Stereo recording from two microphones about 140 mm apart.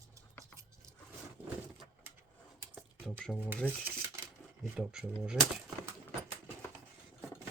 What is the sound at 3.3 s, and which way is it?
Speech, 15° right (ahead or behind).